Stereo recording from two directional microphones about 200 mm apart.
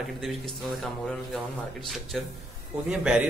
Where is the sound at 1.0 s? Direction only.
Centre (ahead or behind).